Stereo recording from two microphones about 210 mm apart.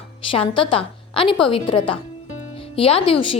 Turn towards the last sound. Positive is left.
turn(degrees=25)  # may be behind; listen again after turning